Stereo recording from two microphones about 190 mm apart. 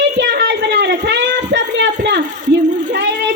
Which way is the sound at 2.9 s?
65° right (ahead or behind).